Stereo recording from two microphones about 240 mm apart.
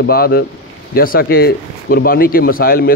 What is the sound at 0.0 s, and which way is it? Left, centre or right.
A man's voice, left.